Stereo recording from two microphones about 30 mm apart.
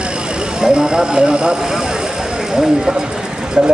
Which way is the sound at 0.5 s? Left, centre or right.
Right.